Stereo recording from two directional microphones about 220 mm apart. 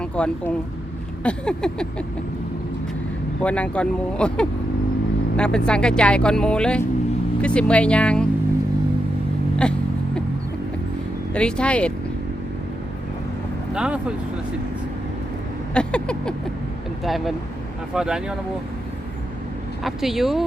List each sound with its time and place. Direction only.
0.0 s speech: 5° left (ahead or behind)
3.4 s speech: 5° left (ahead or behind)
9.6 s speech: 5° left (ahead or behind)
11.3 s speech: 5° left (ahead or behind)
13.7 s speech: 5° right (ahead or behind)
15.7 s rodents: 5° left (ahead or behind)
17.0 s speech: centre (ahead or behind)
19.8 s speech: centre (ahead or behind)